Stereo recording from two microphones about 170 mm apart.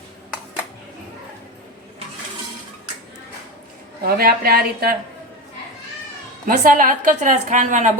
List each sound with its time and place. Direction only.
4.0 s a woman's voice: 60° right (ahead or behind)
6.4 s a woman's voice: 50° right (ahead or behind)